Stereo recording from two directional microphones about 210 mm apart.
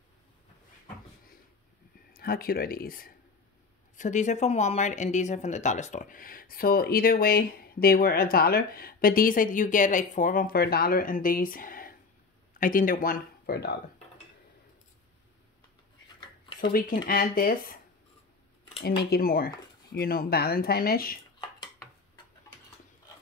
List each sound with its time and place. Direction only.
2.1 s speech: 45° left (ahead or behind)
16.6 s speech: 45° left (ahead or behind)
18.8 s speech: 50° left (ahead or behind)